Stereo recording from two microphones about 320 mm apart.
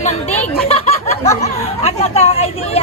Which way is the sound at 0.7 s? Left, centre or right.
Centre.